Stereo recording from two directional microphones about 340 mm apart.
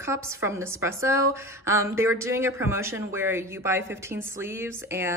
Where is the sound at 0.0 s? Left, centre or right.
Centre.